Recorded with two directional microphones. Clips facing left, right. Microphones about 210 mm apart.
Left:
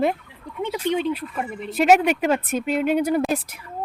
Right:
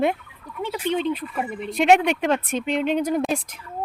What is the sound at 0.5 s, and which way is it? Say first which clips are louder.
Speech: left 2 dB; 20° left (ahead or behind).